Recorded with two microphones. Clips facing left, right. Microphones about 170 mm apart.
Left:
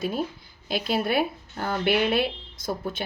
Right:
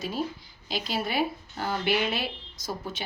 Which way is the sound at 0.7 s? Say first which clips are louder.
Left 5 dB; 55° left (ahead or behind).